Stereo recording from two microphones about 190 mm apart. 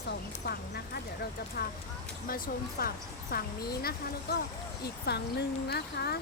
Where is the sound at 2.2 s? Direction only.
50° left (ahead or behind).